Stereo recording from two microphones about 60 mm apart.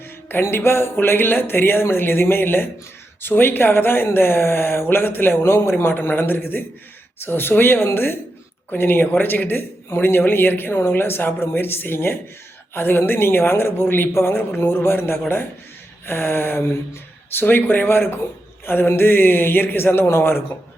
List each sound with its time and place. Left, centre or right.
0.5 s speech: left